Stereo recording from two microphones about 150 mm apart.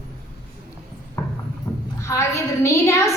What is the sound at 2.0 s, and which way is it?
Speech, 20° left (ahead or behind).